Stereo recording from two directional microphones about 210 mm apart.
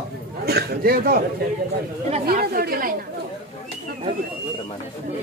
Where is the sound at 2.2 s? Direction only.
45° right (ahead or behind).